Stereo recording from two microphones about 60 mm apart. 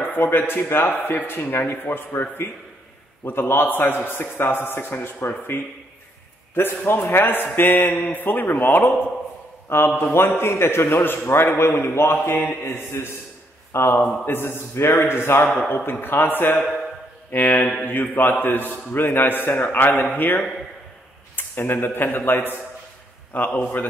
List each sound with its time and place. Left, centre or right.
0.0 s a man's voice: left